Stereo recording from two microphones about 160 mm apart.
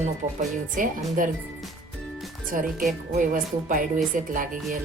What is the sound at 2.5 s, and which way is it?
Speech, 55° right (ahead or behind).